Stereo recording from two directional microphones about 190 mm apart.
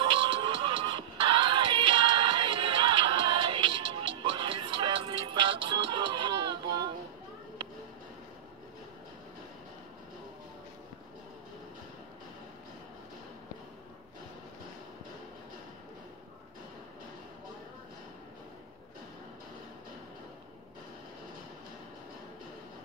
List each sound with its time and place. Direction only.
0.0 s music: 25° right (ahead or behind)